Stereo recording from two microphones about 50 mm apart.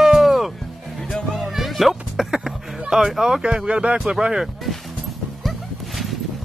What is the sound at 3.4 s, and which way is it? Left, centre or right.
Speech, centre.